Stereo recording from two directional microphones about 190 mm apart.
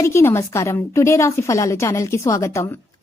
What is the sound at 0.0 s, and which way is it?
A woman's voice, 15° left (ahead or behind).